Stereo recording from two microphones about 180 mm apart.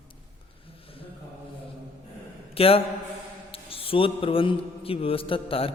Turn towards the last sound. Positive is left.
turn(degrees=30)  # may be behind; listen again after turning